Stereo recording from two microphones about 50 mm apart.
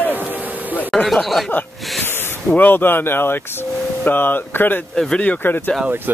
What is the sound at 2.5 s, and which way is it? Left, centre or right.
Speech, left.